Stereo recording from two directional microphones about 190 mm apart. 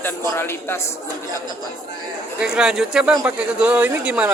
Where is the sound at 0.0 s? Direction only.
10° left (ahead or behind).